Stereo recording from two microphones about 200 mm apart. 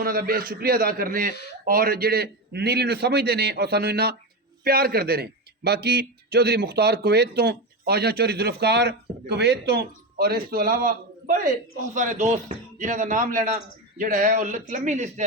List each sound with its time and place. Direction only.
0.0 s a man's voice: 50° right (ahead or behind)